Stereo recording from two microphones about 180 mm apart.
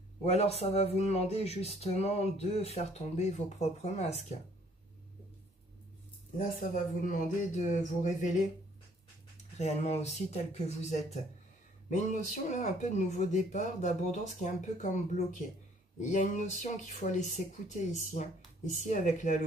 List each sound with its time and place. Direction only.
0.2 s speech: 35° left (ahead or behind)
6.3 s speech: 50° left (ahead or behind)
9.6 s speech: 40° left (ahead or behind)
16.0 s speech: 45° left (ahead or behind)